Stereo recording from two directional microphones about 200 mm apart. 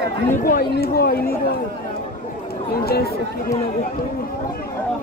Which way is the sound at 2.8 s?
50° left (ahead or behind).